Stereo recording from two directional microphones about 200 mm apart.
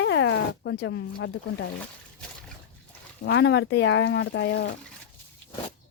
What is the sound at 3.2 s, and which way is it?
Speech, 65° left (ahead or behind).